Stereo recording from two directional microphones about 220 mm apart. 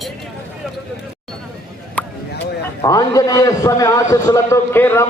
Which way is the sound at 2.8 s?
15° left (ahead or behind).